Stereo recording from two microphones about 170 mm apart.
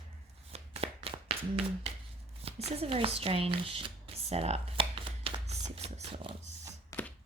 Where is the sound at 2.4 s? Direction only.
35° right (ahead or behind).